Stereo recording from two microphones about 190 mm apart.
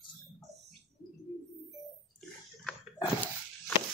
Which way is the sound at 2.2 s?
Centre (ahead or behind).